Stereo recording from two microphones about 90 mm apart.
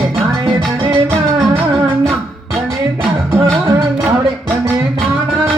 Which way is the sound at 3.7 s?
30° right (ahead or behind).